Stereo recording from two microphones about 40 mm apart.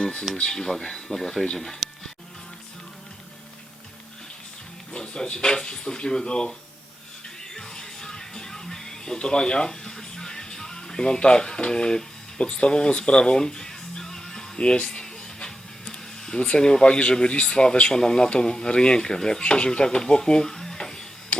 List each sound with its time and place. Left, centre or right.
0.0 s speech: left
4.9 s speech: left
7.5 s music: centre
9.1 s speech: left
13.3 s music: centre
16.8 s speech: left